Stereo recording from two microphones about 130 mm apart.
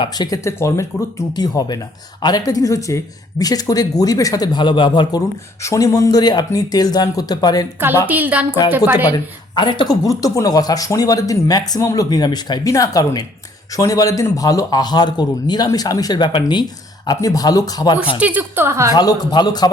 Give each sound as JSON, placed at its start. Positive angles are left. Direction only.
{"t": 0.0, "sound": "speech", "side_deg": 30}
{"t": 5.6, "sound": "speech", "side_deg": 25}
{"t": 8.0, "sound": "a woman's voice", "side_deg": -10}
{"t": 9.0, "sound": "speech", "side_deg": 35}
{"t": 18.2, "sound": "a woman's voice", "side_deg": -10}
{"t": 18.9, "sound": "a man's voice", "side_deg": 35}